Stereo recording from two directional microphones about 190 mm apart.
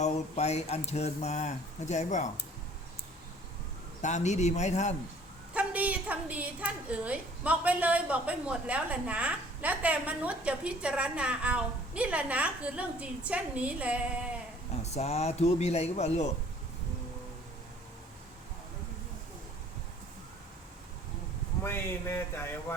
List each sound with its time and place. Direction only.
0.0 s a man's voice: 35° left (ahead or behind)
4.0 s a man's voice: 40° left (ahead or behind)
5.5 s a woman's voice: 5° right (ahead or behind)
14.8 s a man's voice: 35° left (ahead or behind)
21.6 s speech: 10° left (ahead or behind)